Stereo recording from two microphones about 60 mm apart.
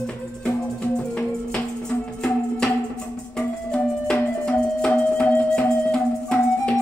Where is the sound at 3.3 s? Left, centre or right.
Centre.